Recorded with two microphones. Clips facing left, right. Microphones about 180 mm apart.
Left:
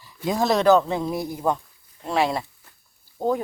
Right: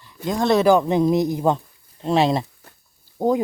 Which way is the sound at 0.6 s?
10° right (ahead or behind).